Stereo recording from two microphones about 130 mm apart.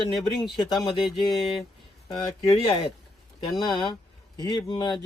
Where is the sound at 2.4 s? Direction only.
50° left (ahead or behind).